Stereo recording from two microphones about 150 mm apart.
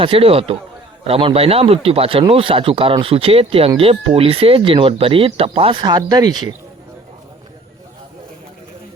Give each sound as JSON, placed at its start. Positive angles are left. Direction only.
{"t": 0.0, "sound": "speech", "side_deg": -35}